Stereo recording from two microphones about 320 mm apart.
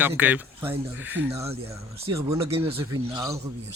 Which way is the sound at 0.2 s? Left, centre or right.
Centre.